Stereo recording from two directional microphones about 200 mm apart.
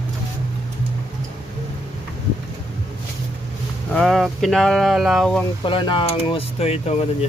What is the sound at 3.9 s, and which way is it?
Speech, centre (ahead or behind).